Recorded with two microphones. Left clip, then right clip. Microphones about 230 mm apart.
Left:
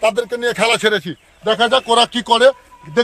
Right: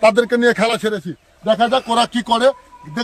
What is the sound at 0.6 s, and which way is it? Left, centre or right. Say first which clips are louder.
Speech: left 3 dB; centre.